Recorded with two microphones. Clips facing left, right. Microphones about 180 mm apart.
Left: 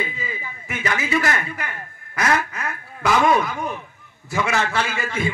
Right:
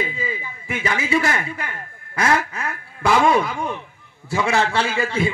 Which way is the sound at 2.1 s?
30° right (ahead or behind).